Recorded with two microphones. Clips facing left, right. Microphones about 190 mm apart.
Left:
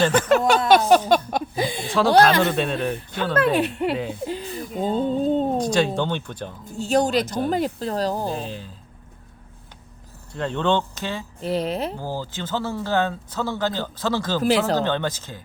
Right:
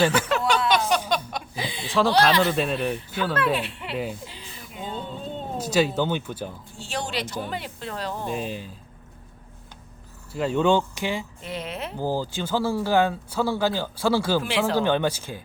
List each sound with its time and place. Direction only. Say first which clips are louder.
0.0 s speech: left 2 dB; 10° right (ahead or behind)
0.3 s a sound: left 6 dB; 45° left (ahead or behind)
2.4 s speech: left 1 dB; centre (ahead or behind)
3.3 s speech: left 8 dB; 45° left (ahead or behind)
4.1 s a sound: left 11 dB; 55° left (ahead or behind)
5.5 s speech: left 2 dB; 5° right (ahead or behind)
6.7 s speech: left 15 dB; 40° left (ahead or behind)
8.4 s speech: right 1 dB; 10° right (ahead or behind)
10.3 s speech: right 1 dB; 5° right (ahead or behind)
11.4 s speech: left 13 dB; 35° left (ahead or behind)
11.9 s speech: right 3 dB; 15° right (ahead or behind)
14.4 s speech: left 5 dB; 40° left (ahead or behind)
14.8 s speech: right 1 dB; 10° right (ahead or behind)